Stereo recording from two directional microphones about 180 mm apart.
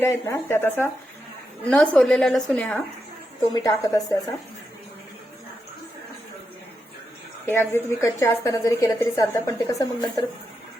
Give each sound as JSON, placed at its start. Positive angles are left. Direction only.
{"t": 0.0, "sound": "a woman's voice", "side_deg": 15}
{"t": 3.5, "sound": "speech", "side_deg": 20}
{"t": 7.4, "sound": "a woman's voice", "side_deg": 10}